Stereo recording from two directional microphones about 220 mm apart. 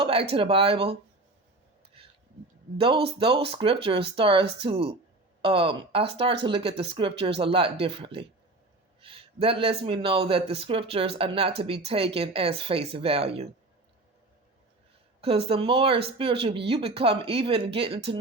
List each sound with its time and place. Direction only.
0.0 s speech: 25° right (ahead or behind)
2.7 s speech: 25° right (ahead or behind)
9.0 s a sound: 25° right (ahead or behind)
9.8 s speech: 25° right (ahead or behind)
15.2 s speech: 25° right (ahead or behind)